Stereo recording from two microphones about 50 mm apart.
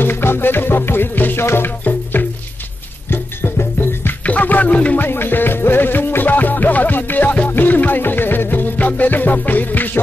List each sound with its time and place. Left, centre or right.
0.0 s music: left
2.2 s music: left
4.2 s music: left
4.9 s music: left